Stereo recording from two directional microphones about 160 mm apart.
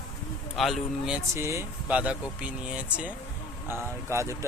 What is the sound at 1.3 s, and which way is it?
Speech, 15° right (ahead or behind).